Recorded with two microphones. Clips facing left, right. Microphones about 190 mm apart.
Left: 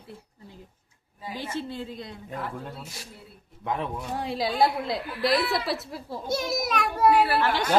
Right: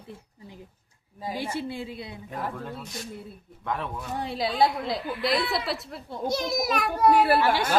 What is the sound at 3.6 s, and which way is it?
Speech, 20° left (ahead or behind).